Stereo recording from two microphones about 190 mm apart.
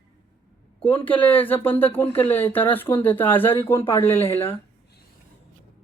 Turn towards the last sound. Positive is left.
turn(degrees=10)  # may be behind; listen again after turning